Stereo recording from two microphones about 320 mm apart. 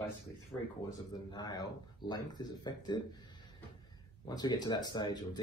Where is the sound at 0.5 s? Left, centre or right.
Centre.